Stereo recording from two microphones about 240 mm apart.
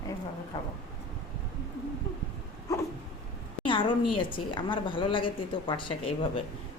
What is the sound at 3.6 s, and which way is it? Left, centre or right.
A woman's voice, left.